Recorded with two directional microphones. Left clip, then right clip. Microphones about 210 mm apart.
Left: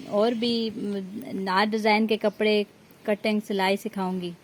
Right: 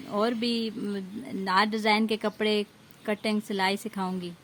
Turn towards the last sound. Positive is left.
turn(degrees=0)  # may be behind; listen again after turning